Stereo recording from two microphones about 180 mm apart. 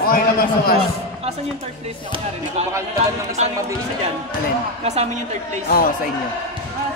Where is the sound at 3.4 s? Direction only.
35° right (ahead or behind).